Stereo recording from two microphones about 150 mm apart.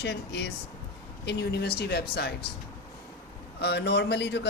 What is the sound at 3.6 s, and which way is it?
Speech, 90° left.